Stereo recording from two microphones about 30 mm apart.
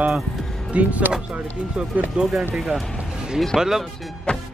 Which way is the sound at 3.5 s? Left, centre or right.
Centre.